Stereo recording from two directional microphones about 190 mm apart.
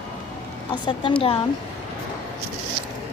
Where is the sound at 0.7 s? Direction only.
25° left (ahead or behind).